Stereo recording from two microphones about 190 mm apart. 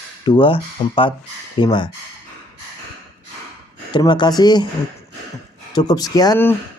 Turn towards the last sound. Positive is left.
turn(degrees=15)  # may be behind; listen again after turning